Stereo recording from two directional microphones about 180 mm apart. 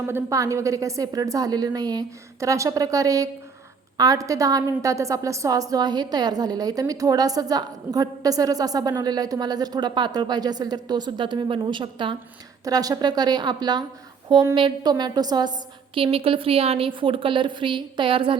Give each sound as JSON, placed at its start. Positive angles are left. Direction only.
{"t": 0.0, "sound": "a woman's voice", "side_deg": -10}